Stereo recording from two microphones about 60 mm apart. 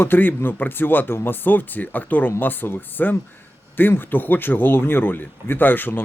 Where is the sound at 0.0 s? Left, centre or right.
Left.